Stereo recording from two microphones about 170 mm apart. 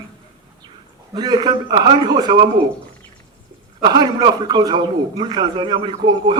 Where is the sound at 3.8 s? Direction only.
25° right (ahead or behind).